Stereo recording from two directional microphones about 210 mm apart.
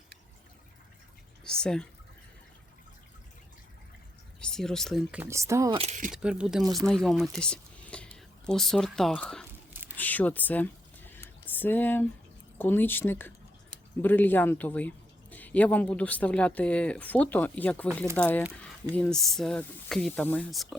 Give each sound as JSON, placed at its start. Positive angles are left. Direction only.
{"t": 1.5, "sound": "speech", "side_deg": 5}
{"t": 4.4, "sound": "speech", "side_deg": 5}
{"t": 5.7, "sound": "speech", "side_deg": -30}
{"t": 6.1, "sound": "speech", "side_deg": -5}
{"t": 10.0, "sound": "a sound", "side_deg": 10}
{"t": 12.5, "sound": "speech", "side_deg": 10}